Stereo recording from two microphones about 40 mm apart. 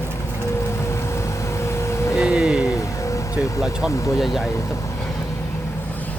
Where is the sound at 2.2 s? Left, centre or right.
Right.